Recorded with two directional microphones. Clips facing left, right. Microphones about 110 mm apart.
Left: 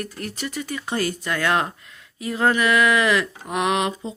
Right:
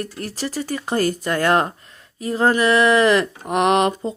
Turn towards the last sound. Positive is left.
turn(degrees=-50)  # may be behind; listen again after turning